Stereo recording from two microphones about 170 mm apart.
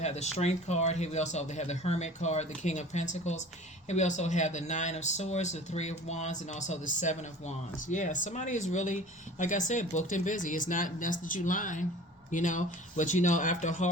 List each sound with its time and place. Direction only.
0.0 s speech: 40° left (ahead or behind)